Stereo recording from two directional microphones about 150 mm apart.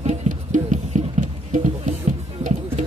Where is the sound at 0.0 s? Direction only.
50° right (ahead or behind).